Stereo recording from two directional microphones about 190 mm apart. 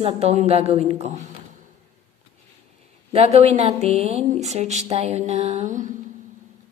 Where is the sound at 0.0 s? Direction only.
35° right (ahead or behind).